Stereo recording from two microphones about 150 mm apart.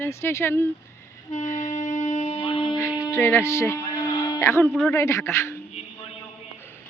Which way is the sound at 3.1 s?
15° left (ahead or behind).